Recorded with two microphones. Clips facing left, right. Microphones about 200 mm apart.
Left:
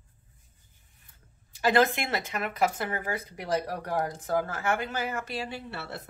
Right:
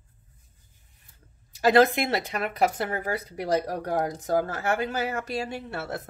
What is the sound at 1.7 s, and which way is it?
Speech, 35° right (ahead or behind).